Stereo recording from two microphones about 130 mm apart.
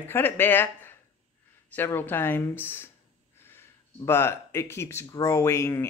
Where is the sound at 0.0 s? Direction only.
15° left (ahead or behind).